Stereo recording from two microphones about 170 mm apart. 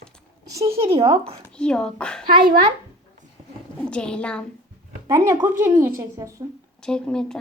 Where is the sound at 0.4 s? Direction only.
20° right (ahead or behind).